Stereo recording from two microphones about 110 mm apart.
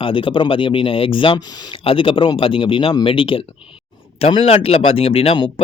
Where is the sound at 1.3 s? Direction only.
40° left (ahead or behind).